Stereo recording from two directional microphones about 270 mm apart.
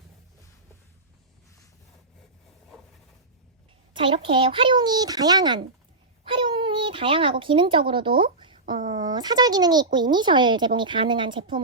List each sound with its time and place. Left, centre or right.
3.9 s a child's voice: centre
6.2 s a sound: centre
8.9 s a child's voice: centre